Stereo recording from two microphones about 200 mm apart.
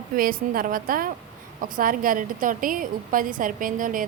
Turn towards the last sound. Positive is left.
turn(degrees=-40)  # may be behind; listen again after turning